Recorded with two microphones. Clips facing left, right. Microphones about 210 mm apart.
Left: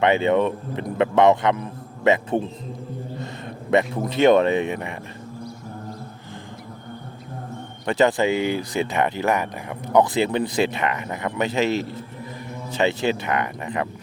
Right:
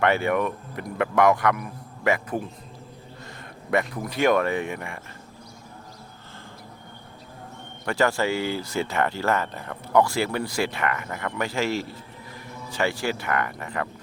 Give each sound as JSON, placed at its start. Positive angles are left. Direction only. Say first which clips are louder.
{"t": 0.0, "sound": "speech", "louder": "left 4 dB", "side_deg": 20}
{"t": 3.7, "sound": "speech", "louder": "left 5 dB", "side_deg": 25}
{"t": 7.9, "sound": "speech", "louder": "left 4 dB", "side_deg": 20}